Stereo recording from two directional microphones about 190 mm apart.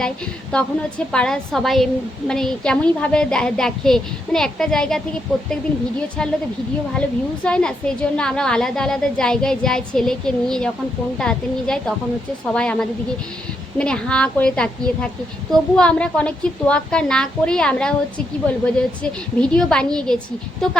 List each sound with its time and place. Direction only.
0.5 s a woman's voice: 5° left (ahead or behind)
7.4 s a woman's voice: 5° left (ahead or behind)